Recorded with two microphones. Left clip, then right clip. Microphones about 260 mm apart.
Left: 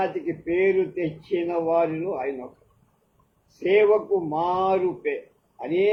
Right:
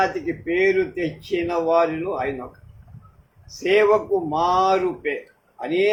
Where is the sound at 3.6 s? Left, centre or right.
Right.